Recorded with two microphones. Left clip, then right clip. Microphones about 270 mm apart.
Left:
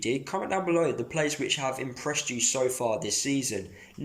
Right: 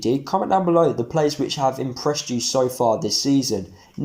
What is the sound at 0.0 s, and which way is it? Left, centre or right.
Speech, centre.